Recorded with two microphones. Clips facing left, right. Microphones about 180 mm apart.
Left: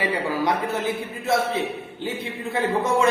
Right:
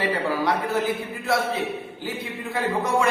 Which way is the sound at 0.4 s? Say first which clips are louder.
Right 1 dB; 20° left (ahead or behind).